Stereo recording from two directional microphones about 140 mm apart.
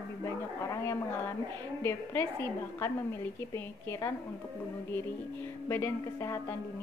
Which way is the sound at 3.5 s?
20° left (ahead or behind).